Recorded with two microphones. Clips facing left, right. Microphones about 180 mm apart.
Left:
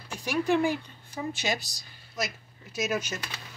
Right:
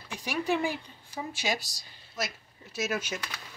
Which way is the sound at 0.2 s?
10° right (ahead or behind).